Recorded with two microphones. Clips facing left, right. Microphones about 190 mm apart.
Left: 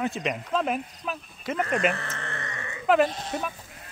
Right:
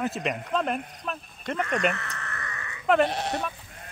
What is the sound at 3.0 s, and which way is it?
Speech, 70° right (ahead or behind).